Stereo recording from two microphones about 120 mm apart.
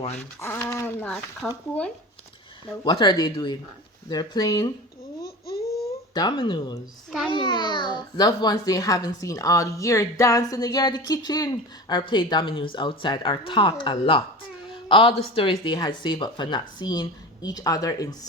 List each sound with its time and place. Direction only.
0.2 s speech: 20° left (ahead or behind)
0.9 s speech: 5° left (ahead or behind)
2.8 s a child's voice: 40° left (ahead or behind)
5.8 s a sound: 35° left (ahead or behind)
7.3 s a child's voice: 40° left (ahead or behind)